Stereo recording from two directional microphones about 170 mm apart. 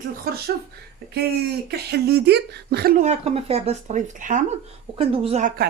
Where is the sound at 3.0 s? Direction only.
40° right (ahead or behind).